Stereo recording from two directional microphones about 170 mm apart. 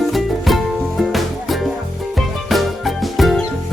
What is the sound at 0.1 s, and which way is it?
Music, centre (ahead or behind).